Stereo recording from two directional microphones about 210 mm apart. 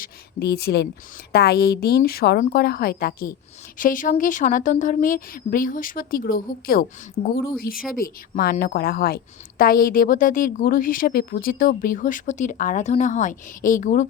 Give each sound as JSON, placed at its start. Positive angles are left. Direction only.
{"t": 0.0, "sound": "a woman's voice", "side_deg": 50}